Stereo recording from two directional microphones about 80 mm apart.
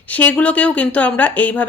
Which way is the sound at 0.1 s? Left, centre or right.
Centre.